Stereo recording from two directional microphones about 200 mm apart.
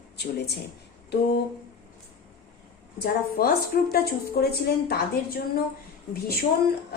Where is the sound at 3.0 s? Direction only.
50° left (ahead or behind).